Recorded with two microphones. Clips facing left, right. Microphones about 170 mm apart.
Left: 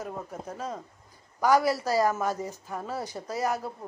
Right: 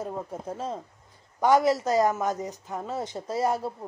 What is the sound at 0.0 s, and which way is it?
A woman's voice, 25° right (ahead or behind).